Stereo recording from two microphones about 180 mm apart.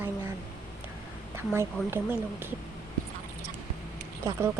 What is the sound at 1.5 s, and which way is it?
Speech, 15° right (ahead or behind).